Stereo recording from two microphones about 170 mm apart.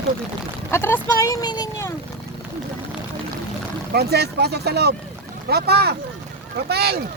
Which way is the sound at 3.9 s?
70° right (ahead or behind).